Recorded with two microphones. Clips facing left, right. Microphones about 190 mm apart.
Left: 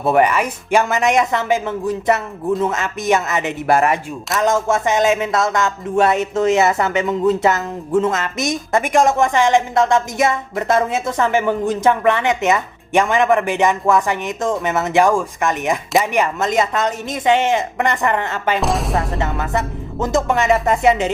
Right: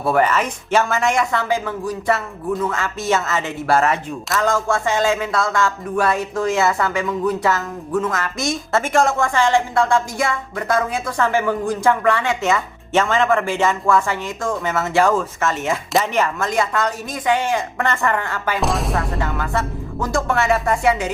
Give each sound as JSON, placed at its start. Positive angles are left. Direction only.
{"t": 0.0, "sound": "speech", "side_deg": 20}
{"t": 18.6, "sound": "music", "side_deg": 0}
{"t": 19.2, "sound": "speech", "side_deg": 25}